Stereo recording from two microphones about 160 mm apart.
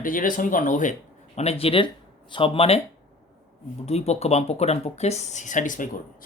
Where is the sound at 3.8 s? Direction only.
40° left (ahead or behind).